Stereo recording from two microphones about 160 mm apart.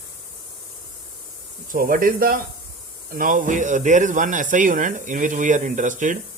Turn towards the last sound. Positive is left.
turn(degrees=-50)  # may be behind; listen again after turning